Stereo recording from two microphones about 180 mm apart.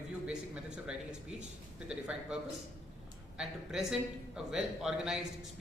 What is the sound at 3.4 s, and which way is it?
A man's voice, 5° right (ahead or behind).